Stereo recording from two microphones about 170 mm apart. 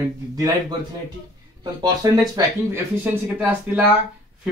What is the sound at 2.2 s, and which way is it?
Speech, 20° right (ahead or behind).